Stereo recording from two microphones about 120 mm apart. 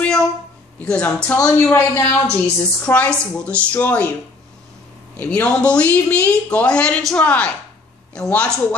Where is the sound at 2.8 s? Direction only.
10° left (ahead or behind).